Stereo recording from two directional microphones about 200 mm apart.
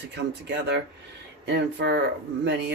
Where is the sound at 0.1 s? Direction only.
60° right (ahead or behind).